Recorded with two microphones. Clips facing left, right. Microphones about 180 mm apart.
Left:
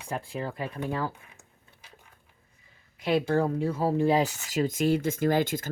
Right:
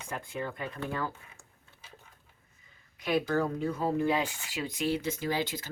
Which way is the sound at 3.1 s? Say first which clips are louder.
Left 4 dB; 30° left (ahead or behind).